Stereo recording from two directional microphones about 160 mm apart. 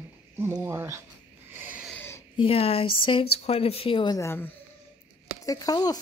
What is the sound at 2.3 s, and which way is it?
Speech, 35° left (ahead or behind).